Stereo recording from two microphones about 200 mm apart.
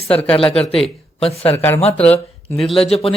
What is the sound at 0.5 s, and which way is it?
Speech, 5° left (ahead or behind).